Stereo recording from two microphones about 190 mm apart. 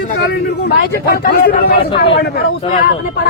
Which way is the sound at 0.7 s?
50° left (ahead or behind).